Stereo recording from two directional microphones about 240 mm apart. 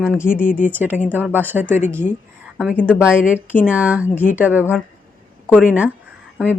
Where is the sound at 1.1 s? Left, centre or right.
Centre.